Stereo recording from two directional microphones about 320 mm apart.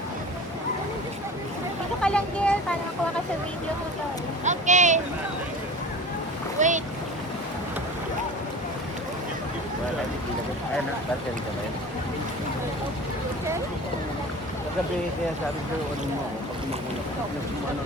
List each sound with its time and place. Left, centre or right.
2.0 s speech: centre
4.4 s speech: right
6.6 s speech: right